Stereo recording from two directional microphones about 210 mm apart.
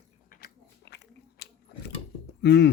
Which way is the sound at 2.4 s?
55° left (ahead or behind).